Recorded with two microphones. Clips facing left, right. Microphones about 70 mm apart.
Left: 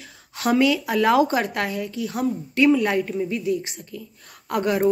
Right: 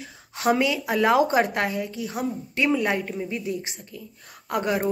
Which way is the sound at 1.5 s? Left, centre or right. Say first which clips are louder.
Even; centre.